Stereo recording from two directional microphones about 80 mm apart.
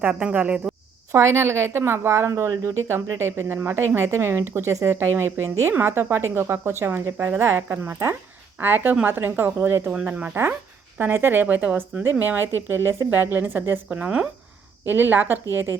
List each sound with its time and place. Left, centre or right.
0.0 s speech: centre
1.1 s a woman's voice: right
9.9 s a woman's voice: centre
14.8 s a woman's voice: right